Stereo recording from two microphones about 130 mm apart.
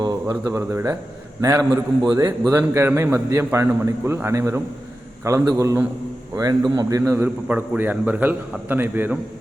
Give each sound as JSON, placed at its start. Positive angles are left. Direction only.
{"t": 0.0, "sound": "a man's voice", "side_deg": -25}